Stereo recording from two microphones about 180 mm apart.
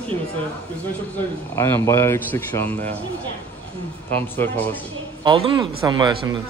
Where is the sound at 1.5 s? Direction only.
15° left (ahead or behind).